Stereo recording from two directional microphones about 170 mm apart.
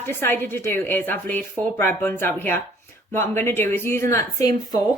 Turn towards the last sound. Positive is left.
turn(degrees=20)  # may be behind; listen again after turning